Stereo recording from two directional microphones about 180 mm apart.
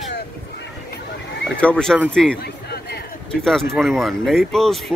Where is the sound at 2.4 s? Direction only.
60° left (ahead or behind).